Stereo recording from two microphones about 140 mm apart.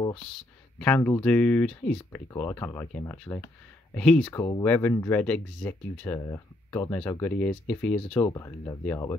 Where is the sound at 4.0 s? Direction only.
5° left (ahead or behind).